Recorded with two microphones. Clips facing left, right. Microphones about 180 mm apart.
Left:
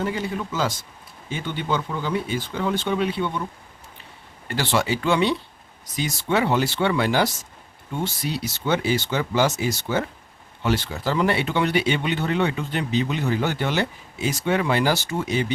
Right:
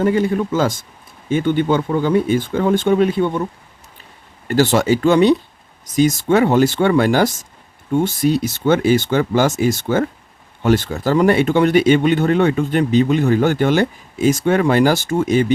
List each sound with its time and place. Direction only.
0.0 s speech: 50° right (ahead or behind)
4.4 s speech: 45° right (ahead or behind)